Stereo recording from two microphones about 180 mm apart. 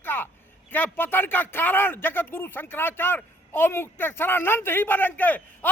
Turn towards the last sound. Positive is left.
turn(degrees=10)  # may be behind; listen again after turning